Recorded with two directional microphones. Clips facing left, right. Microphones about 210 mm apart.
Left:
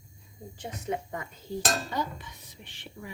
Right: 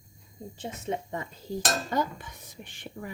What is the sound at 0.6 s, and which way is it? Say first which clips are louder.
Speech: even; 25° right (ahead or behind).